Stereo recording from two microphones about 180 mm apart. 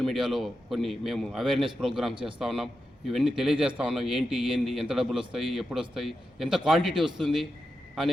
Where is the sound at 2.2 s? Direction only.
30° right (ahead or behind).